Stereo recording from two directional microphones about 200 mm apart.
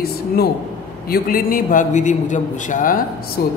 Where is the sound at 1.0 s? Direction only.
45° left (ahead or behind).